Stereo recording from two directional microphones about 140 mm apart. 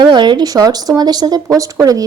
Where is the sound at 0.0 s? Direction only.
35° right (ahead or behind).